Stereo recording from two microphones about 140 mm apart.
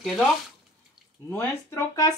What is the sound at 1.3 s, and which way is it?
Speech, 15° left (ahead or behind).